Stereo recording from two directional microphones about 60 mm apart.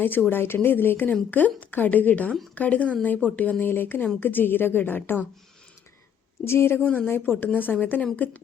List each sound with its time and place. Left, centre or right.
0.0 s speech: left
6.4 s a woman's voice: left
6.8 s speech: left